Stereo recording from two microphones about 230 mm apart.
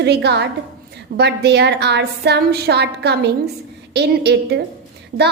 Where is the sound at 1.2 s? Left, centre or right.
Right.